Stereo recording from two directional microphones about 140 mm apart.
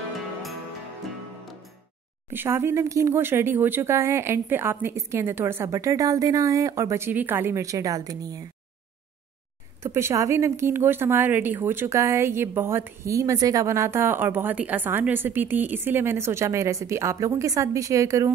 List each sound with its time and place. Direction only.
2.3 s speech: 15° right (ahead or behind)
9.8 s speech: 20° right (ahead or behind)